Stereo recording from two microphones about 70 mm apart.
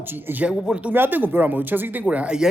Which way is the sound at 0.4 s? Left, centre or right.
Centre.